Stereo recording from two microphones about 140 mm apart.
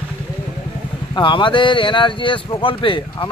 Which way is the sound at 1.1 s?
35° left (ahead or behind).